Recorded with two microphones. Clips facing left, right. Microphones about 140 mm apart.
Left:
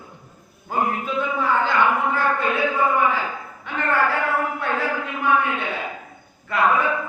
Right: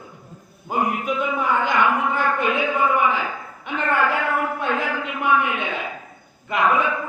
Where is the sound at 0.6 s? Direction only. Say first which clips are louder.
Right 1 dB; 15° right (ahead or behind).